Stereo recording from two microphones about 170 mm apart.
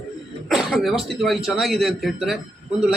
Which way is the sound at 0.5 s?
Centre (ahead or behind).